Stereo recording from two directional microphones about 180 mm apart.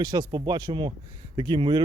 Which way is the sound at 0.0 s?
20° right (ahead or behind).